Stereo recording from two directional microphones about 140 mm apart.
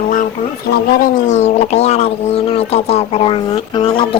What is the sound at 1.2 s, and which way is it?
Speech, 55° left (ahead or behind).